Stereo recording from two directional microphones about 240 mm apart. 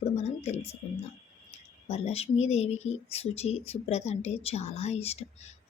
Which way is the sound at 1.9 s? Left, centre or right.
Left.